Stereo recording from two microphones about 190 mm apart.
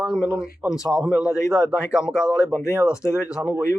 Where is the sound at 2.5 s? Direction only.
15° left (ahead or behind).